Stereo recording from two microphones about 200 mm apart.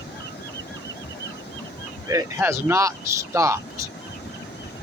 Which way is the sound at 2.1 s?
15° right (ahead or behind).